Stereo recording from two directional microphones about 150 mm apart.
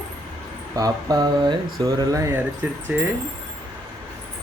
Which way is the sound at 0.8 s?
25° right (ahead or behind).